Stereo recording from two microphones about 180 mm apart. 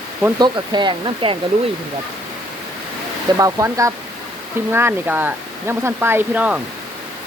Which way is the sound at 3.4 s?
20° right (ahead or behind).